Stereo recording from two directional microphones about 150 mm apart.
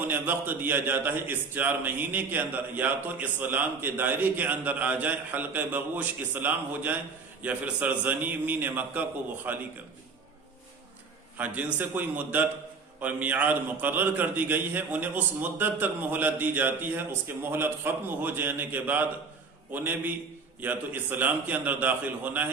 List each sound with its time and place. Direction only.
0.1 s a man's voice: 15° right (ahead or behind)
11.3 s a man's voice: 10° right (ahead or behind)